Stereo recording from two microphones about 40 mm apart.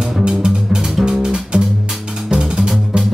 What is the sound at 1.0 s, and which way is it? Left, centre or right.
Music, centre.